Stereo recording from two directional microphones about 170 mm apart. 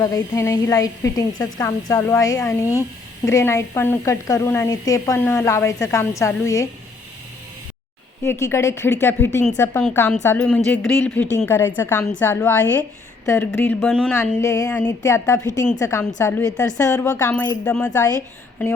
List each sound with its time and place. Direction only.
0.0 s a woman's voice: 20° left (ahead or behind)
8.2 s a woman's voice: 15° left (ahead or behind)
16.6 s a woman's voice: 10° left (ahead or behind)
17.9 s a woman's voice: 20° left (ahead or behind)